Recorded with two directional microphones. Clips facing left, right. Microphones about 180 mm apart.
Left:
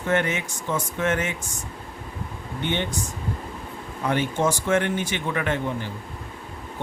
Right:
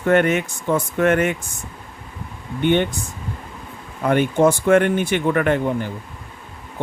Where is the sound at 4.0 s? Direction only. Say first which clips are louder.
Right 7 dB; 55° right (ahead or behind).